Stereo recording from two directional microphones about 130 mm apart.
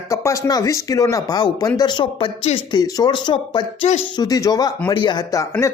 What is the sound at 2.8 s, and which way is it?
Speech, 35° left (ahead or behind).